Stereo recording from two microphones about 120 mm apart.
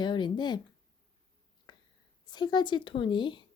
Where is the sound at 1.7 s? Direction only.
40° left (ahead or behind).